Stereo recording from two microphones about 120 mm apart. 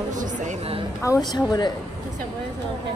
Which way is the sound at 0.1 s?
90° right.